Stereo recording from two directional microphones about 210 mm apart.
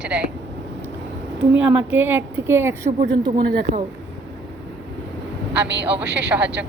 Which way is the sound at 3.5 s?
35° right (ahead or behind).